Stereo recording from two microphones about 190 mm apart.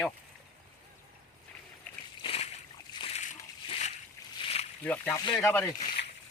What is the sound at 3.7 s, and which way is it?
Boat, 35° left (ahead or behind).